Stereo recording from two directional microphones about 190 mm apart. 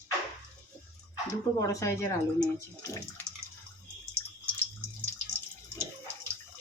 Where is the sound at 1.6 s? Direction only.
15° left (ahead or behind).